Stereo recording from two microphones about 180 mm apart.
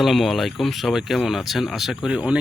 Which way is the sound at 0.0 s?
Centre (ahead or behind).